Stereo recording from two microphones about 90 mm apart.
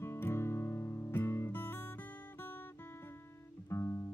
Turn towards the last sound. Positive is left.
turn(degrees=30)  # may be behind; listen again after turning